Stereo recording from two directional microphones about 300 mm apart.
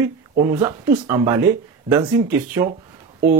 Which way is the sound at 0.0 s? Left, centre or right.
Centre.